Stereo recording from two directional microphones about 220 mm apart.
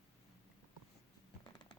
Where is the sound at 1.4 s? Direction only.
20° left (ahead or behind).